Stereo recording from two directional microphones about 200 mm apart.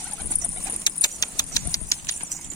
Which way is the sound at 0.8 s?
20° left (ahead or behind).